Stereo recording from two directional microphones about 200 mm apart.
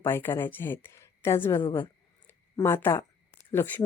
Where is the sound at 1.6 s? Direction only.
25° left (ahead or behind).